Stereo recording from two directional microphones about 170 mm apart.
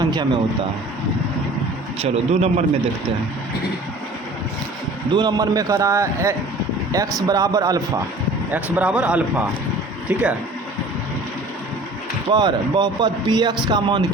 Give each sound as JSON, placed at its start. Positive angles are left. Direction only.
{"t": 0.0, "sound": "a sound", "side_deg": -25}
{"t": 2.0, "sound": "speech", "side_deg": -35}
{"t": 5.1, "sound": "speech", "side_deg": -25}
{"t": 8.5, "sound": "speech", "side_deg": -10}
{"t": 12.3, "sound": "speech", "side_deg": -25}